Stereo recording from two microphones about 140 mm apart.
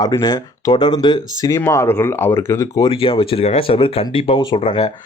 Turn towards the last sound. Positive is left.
turn(degrees=40)  # may be behind; listen again after turning